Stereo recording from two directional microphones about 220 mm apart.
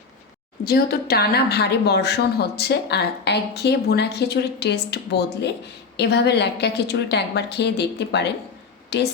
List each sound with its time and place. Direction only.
0.6 s a woman's voice: 45° left (ahead or behind)